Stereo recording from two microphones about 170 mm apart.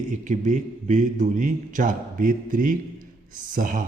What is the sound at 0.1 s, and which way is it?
A man's voice, 45° right (ahead or behind).